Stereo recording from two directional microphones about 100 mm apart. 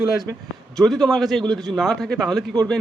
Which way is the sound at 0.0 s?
5° right (ahead or behind).